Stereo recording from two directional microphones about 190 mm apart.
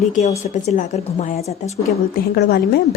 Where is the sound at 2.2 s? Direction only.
55° left (ahead or behind).